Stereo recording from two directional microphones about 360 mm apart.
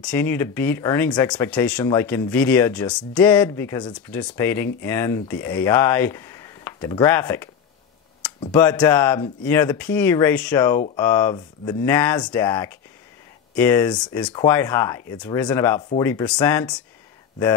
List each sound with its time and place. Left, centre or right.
0.0 s speech: centre
8.5 s speech: centre